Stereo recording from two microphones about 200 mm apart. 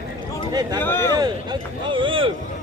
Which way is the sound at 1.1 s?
20° right (ahead or behind).